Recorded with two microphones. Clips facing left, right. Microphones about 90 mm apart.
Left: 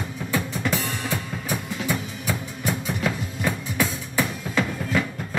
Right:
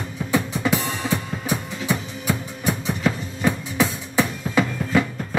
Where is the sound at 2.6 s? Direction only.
Centre (ahead or behind).